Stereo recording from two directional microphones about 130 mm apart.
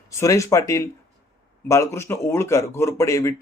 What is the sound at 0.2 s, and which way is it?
Speech, 25° left (ahead or behind).